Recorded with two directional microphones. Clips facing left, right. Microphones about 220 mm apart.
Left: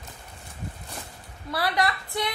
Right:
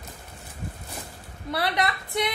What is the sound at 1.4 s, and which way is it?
Speech, 20° right (ahead or behind).